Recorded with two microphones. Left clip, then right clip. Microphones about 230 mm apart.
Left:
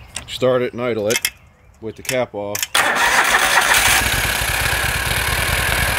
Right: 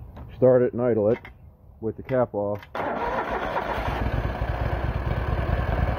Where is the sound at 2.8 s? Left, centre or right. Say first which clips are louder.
Left 13 dB; left.